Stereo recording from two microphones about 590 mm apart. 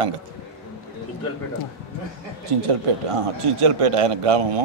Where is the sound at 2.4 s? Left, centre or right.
Right.